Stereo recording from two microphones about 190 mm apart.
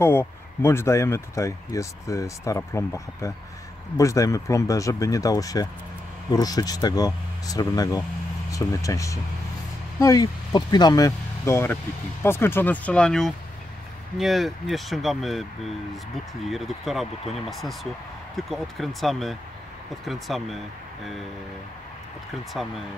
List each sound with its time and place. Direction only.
0.0 s speech: 10° left (ahead or behind)